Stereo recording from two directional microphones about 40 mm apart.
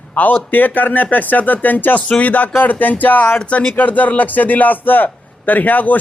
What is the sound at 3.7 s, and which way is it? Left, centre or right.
Speech, left.